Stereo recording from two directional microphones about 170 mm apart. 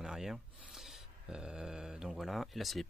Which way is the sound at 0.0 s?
5° right (ahead or behind).